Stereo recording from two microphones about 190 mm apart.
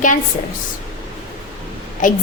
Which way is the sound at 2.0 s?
45° left (ahead or behind).